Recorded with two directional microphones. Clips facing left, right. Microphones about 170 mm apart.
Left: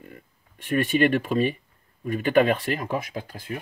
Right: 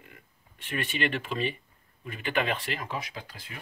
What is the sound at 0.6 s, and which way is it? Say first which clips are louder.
Speech: left 10 dB; 50° left (ahead or behind).